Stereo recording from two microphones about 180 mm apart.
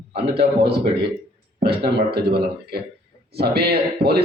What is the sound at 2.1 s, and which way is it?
A man's voice, 60° right (ahead or behind).